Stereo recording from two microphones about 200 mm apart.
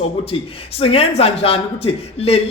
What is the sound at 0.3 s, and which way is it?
A man's voice, 30° left (ahead or behind).